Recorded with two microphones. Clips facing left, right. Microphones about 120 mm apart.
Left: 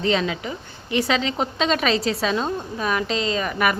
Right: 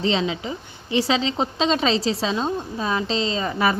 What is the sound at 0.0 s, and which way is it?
A woman's voice, 25° right (ahead or behind).